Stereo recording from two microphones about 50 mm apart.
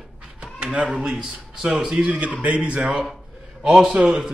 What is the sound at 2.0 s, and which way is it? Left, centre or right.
A man's voice, right.